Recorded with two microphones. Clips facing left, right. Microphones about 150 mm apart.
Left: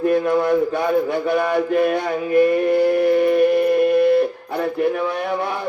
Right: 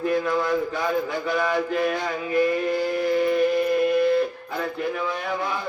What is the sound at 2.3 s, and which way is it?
Music, 60° left (ahead or behind).